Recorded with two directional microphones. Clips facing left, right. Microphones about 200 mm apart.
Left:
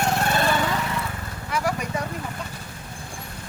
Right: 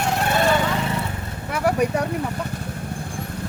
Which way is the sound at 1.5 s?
60° right (ahead or behind).